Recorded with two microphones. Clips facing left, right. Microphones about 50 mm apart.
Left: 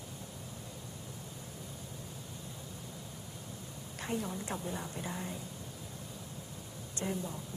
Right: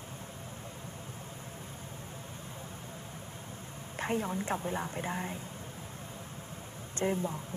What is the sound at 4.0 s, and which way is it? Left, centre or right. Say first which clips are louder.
A woman's voice: right 5 dB; right.